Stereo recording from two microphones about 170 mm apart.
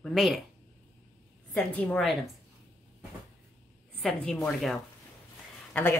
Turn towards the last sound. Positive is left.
turn(degrees=10)  # may be behind; listen again after turning